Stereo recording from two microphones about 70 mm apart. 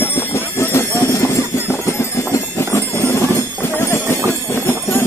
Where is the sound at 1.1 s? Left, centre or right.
Left.